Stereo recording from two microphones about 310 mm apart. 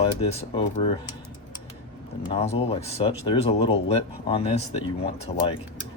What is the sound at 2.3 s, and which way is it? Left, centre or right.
Speech, centre.